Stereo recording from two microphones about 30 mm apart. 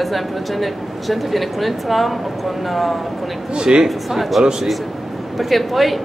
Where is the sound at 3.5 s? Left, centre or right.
Right.